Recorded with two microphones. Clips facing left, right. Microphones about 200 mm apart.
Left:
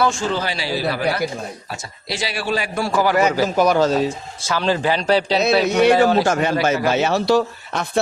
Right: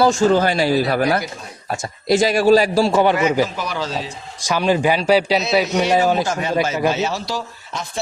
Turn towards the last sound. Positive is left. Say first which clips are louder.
# left 8 dB
turn(degrees=65)  # may be behind; listen again after turning